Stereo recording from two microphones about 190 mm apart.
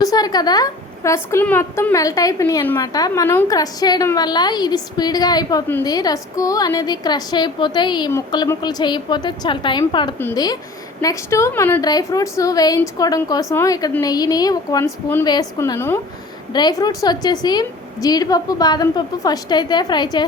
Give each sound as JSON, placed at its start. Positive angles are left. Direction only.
{"t": 0.0, "sound": "a woman's voice", "side_deg": 20}